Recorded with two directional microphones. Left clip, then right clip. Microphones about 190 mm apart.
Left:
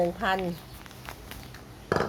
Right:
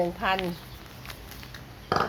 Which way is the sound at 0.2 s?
20° left (ahead or behind).